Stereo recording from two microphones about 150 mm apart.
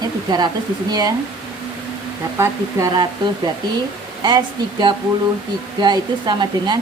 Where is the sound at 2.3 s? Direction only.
20° right (ahead or behind).